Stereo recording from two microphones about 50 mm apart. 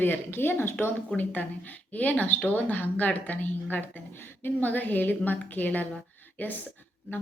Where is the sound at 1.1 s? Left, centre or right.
Left.